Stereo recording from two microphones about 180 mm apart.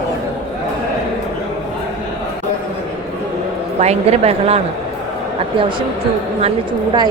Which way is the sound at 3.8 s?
35° right (ahead or behind).